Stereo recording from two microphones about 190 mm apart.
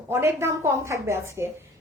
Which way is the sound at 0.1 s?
15° right (ahead or behind).